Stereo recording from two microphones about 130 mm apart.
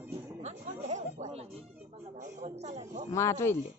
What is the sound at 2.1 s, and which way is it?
Speech, 65° right (ahead or behind).